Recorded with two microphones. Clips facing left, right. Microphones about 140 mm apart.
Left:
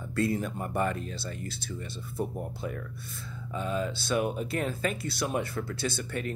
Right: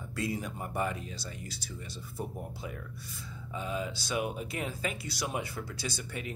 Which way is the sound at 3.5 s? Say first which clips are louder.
Left 4 dB; 10° right (ahead or behind).